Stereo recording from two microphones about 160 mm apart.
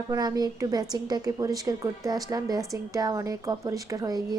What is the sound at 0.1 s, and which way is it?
A woman's voice, 25° right (ahead or behind).